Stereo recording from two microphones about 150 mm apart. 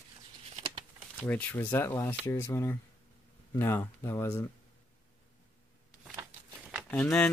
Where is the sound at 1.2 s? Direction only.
10° left (ahead or behind).